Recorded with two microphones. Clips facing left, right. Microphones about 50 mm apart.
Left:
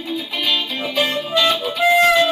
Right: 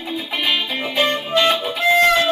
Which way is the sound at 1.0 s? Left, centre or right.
Centre.